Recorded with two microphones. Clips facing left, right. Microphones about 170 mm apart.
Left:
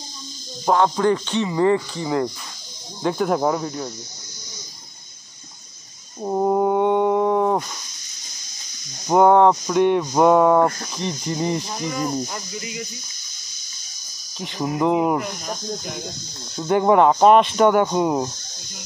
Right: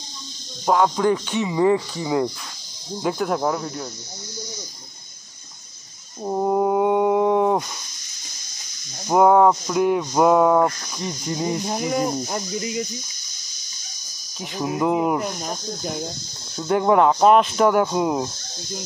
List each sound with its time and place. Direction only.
0.7 s speech: 5° right (ahead or behind)
6.2 s a sound: 5° left (ahead or behind)
9.0 s speech: centre (ahead or behind)
12.3 s speech: 35° right (ahead or behind)
14.4 s speech: centre (ahead or behind)
16.5 s speech: centre (ahead or behind)